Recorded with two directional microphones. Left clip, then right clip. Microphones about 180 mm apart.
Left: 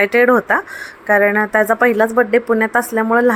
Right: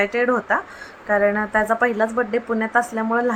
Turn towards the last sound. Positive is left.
turn(degrees=30)  # may be behind; listen again after turning